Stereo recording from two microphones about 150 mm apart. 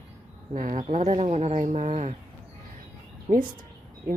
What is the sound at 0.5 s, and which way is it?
Speech, 60° right (ahead or behind).